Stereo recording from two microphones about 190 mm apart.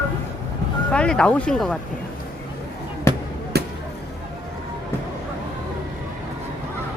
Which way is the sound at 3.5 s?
60° right (ahead or behind).